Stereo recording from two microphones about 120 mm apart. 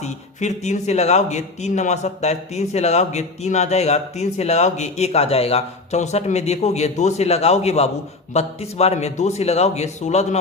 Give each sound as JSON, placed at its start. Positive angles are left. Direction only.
{"t": 0.0, "sound": "a man's voice", "side_deg": 70}